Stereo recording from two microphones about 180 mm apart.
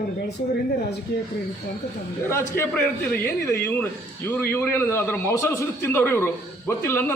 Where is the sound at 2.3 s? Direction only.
15° left (ahead or behind).